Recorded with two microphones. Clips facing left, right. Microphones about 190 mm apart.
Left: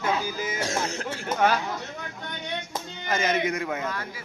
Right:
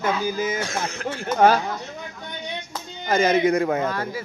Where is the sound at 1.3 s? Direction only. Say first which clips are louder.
Right 6 dB; 35° right (ahead or behind).